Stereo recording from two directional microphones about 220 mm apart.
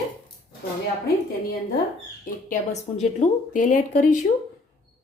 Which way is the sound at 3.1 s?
35° left (ahead or behind).